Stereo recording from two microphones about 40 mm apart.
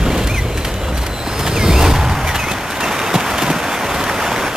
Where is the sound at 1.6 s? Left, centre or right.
Centre.